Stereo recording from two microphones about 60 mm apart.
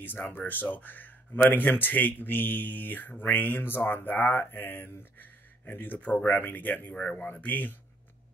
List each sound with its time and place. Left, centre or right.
0.0 s speech: left